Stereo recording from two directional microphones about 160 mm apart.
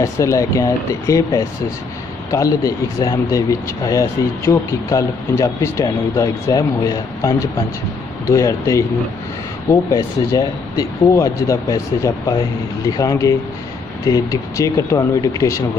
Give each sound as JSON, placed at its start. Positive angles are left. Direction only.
{"t": 0.0, "sound": "speech", "side_deg": 20}